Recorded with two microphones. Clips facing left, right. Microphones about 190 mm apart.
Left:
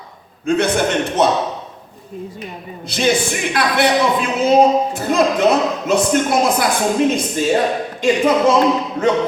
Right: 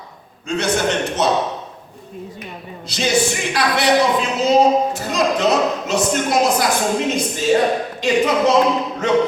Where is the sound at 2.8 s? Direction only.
55° left (ahead or behind).